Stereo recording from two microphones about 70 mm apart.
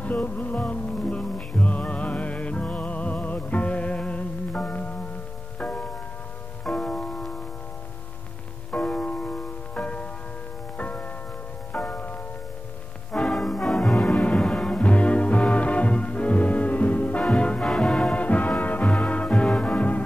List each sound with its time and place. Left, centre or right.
0.0 s music: left
6.6 s music: centre
8.7 s music: centre
13.1 s music: centre